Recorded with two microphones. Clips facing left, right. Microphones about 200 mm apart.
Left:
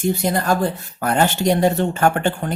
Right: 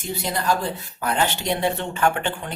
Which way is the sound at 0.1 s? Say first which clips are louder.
Left 2 dB; 50° left (ahead or behind).